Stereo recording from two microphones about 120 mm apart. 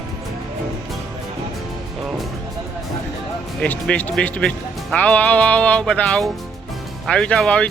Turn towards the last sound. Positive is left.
turn(degrees=10)  # may be behind; listen again after turning